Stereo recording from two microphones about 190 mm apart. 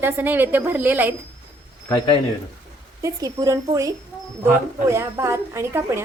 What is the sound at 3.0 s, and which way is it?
Speech, 20° right (ahead or behind).